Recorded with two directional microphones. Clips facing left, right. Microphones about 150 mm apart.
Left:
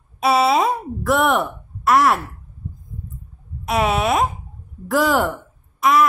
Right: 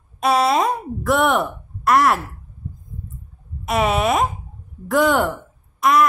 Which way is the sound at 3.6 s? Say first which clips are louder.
Even; centre (ahead or behind).